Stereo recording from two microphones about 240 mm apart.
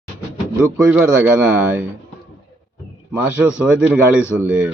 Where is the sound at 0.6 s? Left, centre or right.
Centre.